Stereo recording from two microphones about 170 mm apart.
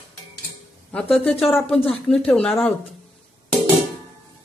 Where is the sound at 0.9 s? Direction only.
5° left (ahead or behind).